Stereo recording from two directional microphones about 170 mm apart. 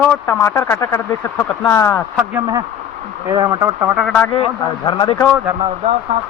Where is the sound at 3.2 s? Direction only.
25° right (ahead or behind).